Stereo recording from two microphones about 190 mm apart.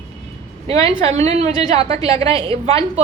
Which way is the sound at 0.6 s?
30° right (ahead or behind).